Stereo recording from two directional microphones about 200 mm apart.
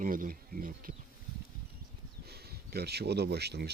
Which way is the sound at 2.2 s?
50° right (ahead or behind).